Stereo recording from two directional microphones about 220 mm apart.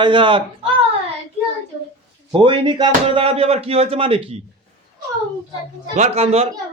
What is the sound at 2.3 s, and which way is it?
Speech, 20° right (ahead or behind).